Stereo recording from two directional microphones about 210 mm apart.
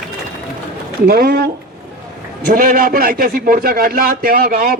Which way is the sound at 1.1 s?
45° right (ahead or behind).